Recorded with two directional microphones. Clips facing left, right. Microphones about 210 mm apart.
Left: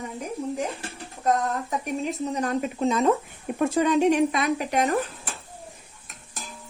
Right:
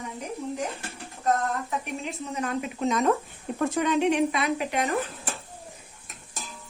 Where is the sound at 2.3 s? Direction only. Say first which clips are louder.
Left 4 dB; 40° left (ahead or behind).